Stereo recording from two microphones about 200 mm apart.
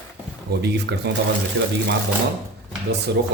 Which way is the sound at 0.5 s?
55° right (ahead or behind).